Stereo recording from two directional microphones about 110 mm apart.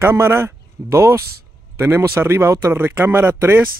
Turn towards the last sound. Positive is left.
turn(degrees=-15)  # may be behind; listen again after turning